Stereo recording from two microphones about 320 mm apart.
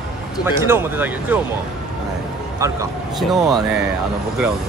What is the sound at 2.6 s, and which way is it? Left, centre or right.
Speech, centre.